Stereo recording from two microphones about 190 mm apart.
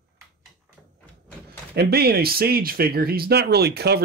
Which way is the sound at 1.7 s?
55° right (ahead or behind).